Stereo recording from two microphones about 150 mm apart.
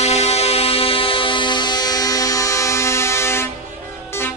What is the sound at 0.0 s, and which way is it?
Music, 45° left (ahead or behind).